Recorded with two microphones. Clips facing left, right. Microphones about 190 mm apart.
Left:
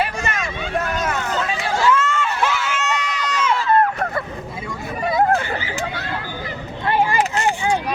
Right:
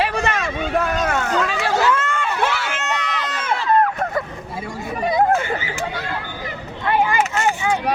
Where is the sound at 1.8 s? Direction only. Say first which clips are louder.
Left 1 dB; 55° right (ahead or behind).